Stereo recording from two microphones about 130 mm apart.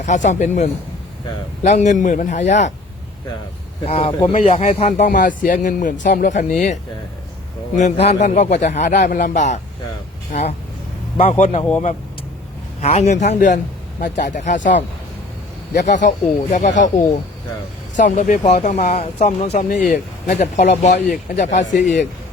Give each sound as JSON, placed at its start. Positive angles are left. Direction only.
{"t": 0.0, "sound": "a man's voice", "side_deg": 70}
{"t": 3.8, "sound": "a man's voice", "side_deg": 50}
{"t": 7.8, "sound": "speech", "side_deg": 60}
{"t": 11.2, "sound": "speech", "side_deg": 60}
{"t": 12.8, "sound": "a man's voice", "side_deg": 55}
{"t": 15.9, "sound": "a man's voice", "side_deg": 70}
{"t": 17.9, "sound": "a man's voice", "side_deg": 70}